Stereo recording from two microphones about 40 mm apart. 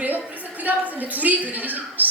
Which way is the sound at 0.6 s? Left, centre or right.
Right.